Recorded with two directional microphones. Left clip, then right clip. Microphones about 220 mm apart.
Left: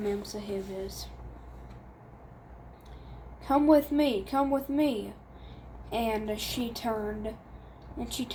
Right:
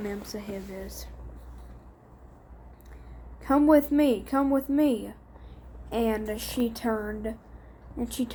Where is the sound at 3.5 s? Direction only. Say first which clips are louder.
Right 2 dB; 55° right (ahead or behind).